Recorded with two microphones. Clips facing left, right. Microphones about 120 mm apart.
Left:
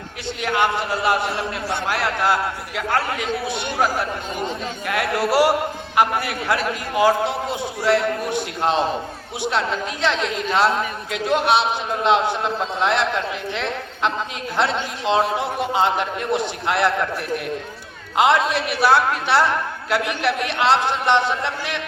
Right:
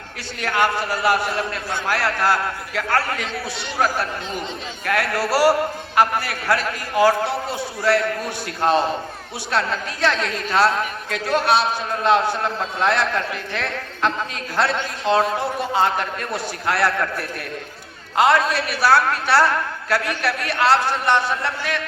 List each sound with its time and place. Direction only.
0.4 s a woman's voice: 20° left (ahead or behind)